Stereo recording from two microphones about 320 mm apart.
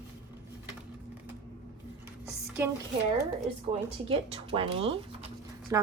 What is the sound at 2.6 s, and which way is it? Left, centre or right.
Speech, centre.